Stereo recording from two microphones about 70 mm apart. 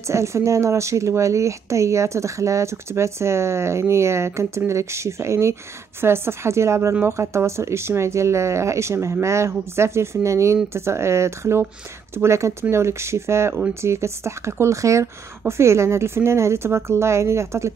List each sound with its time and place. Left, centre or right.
0.0 s speech: right